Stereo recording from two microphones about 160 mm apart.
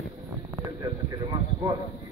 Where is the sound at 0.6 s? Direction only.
25° right (ahead or behind).